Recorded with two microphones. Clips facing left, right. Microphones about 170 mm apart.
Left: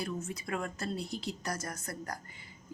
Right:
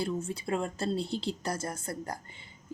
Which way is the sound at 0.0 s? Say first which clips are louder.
Right 5 dB; 30° right (ahead or behind).